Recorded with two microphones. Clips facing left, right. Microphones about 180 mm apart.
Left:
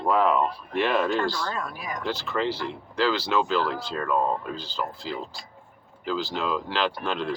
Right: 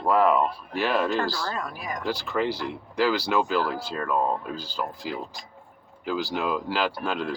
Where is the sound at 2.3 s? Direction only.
10° right (ahead or behind).